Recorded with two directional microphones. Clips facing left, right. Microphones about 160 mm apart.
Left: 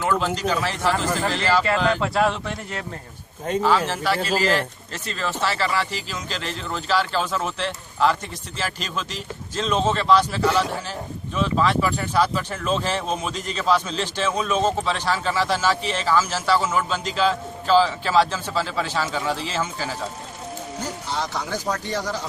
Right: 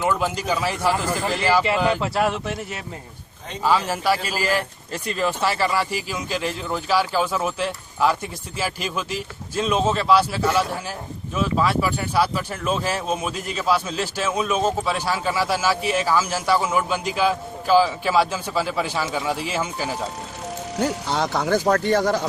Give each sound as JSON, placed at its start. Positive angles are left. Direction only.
{"t": 0.0, "sound": "speech", "side_deg": -15}
{"t": 20.7, "sound": "speech", "side_deg": -70}